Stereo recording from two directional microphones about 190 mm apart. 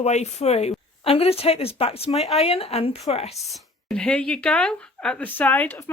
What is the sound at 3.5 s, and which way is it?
Speech, centre (ahead or behind).